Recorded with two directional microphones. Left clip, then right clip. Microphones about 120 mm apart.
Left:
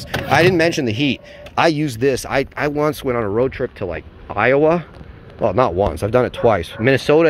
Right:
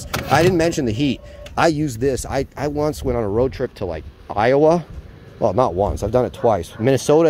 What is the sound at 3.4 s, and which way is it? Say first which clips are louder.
Speech: left 1 dB; 40° right (ahead or behind).